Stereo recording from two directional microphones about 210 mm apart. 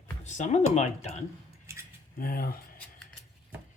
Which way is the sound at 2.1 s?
45° left (ahead or behind).